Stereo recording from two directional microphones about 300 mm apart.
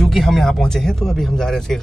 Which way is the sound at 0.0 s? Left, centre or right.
Centre.